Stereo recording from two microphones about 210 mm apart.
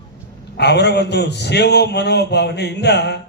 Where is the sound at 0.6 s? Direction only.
55° left (ahead or behind).